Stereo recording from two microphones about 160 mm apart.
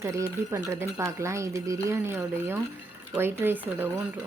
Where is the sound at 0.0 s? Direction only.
20° right (ahead or behind).